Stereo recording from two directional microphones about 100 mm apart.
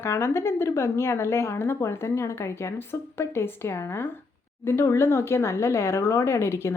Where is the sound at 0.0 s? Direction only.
25° left (ahead or behind).